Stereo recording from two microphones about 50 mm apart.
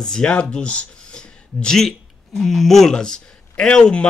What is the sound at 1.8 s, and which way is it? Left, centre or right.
Speech, centre.